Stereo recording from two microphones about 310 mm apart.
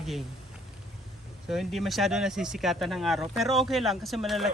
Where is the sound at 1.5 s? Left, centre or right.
Centre.